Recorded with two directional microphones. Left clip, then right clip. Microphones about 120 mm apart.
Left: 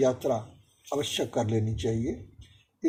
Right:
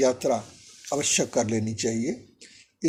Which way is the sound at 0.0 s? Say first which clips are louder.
Right 3 dB; 70° right (ahead or behind).